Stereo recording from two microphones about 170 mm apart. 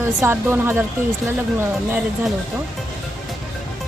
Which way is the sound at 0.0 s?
15° right (ahead or behind).